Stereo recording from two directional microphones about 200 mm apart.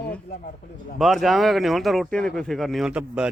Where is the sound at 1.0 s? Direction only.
Centre (ahead or behind).